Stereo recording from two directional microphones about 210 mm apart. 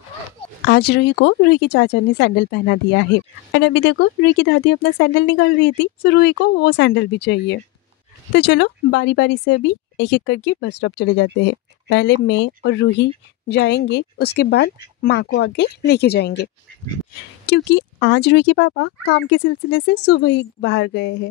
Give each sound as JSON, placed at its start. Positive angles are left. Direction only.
{"t": 0.7, "sound": "speech", "side_deg": 50}
{"t": 17.5, "sound": "speech", "side_deg": 60}